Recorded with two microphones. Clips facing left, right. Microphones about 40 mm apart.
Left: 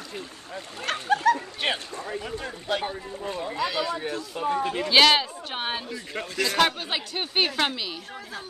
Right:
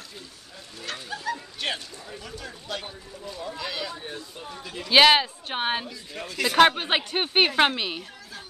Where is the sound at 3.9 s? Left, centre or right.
Left.